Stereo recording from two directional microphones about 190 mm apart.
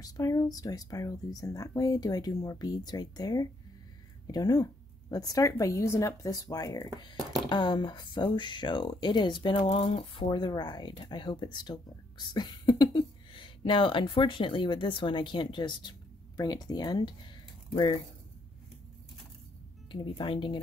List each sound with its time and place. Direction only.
0.0 s speech: 20° left (ahead or behind)
19.9 s speech: 25° left (ahead or behind)